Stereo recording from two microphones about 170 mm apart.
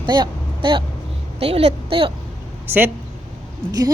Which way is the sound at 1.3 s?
35° right (ahead or behind).